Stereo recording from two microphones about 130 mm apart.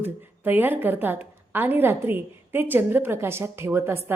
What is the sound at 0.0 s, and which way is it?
A woman's voice, 15° right (ahead or behind).